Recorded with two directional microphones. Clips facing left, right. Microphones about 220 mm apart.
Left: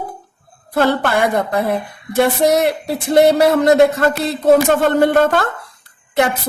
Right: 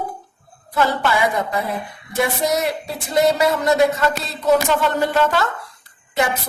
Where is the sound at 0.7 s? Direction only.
55° left (ahead or behind).